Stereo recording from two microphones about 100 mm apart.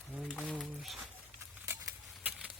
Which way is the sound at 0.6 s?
Centre (ahead or behind).